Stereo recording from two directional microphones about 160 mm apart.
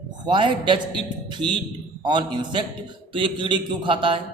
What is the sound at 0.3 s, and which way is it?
A man's voice, 30° right (ahead or behind).